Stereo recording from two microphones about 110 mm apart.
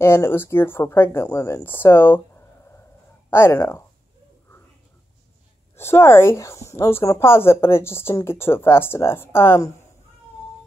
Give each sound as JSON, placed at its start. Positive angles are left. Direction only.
{"t": 0.0, "sound": "speech", "side_deg": 20}
{"t": 5.8, "sound": "speech", "side_deg": 20}